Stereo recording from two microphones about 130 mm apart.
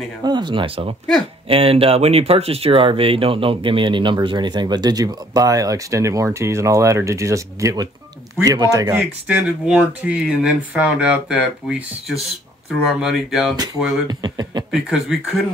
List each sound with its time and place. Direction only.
0.2 s speech: 35° right (ahead or behind); by 11.8 s 5° right (ahead or behind)
12.8 s speech: 5° right (ahead or behind)
14.0 s speech: 30° right (ahead or behind)
14.7 s speech: 5° right (ahead or behind)